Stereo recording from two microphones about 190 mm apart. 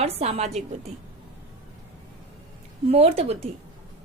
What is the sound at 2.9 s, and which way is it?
Speech, 30° right (ahead or behind).